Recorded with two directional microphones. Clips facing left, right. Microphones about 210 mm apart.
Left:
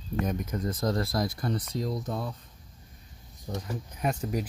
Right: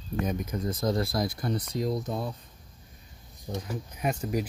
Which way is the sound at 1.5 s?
20° right (ahead or behind).